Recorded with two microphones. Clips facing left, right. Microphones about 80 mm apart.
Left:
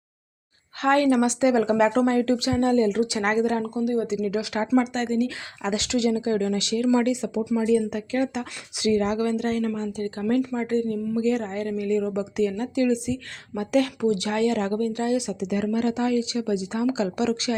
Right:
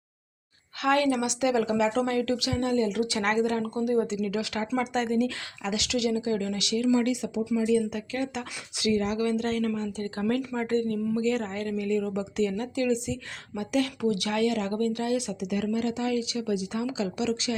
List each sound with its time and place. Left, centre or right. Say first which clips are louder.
0.8 s a woman's voice: left 4 dB; left
3.1 s speech: left 3 dB; centre
3.8 s speech: left 1 dB; centre
4.2 s speech: left 4 dB; left
4.9 s speech: left 1 dB; centre
5.6 s a woman's voice: left 4 dB; left
8.3 s speech: left 4 dB; centre
8.9 s a woman's voice: left 3 dB; left
9.3 s speech: left 2 dB; centre
10.5 s speech: left 2 dB; centre
13.5 s a woman's voice: left 5 dB; left
14.0 s speech: left 3 dB; left
14.7 s a woman's voice: left 3 dB; centre; by 15.7 s left
15.7 s a woman's voice: left 5 dB; left